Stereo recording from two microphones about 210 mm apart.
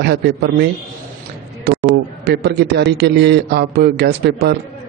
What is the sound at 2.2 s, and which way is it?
A man's voice, 50° right (ahead or behind).